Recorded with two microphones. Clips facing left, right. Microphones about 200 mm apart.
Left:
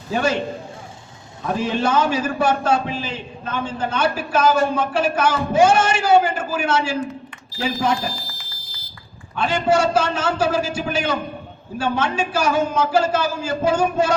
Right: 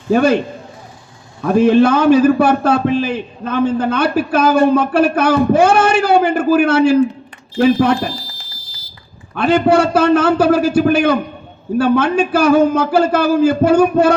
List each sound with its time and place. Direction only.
0.1 s a man's voice: 60° right (ahead or behind)
1.4 s a man's voice: 60° right (ahead or behind)
9.3 s a man's voice: 60° right (ahead or behind)